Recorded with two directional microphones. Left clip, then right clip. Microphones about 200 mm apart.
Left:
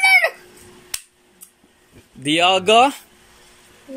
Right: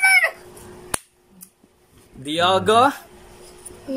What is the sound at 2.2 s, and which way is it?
Male singing, 5° left (ahead or behind).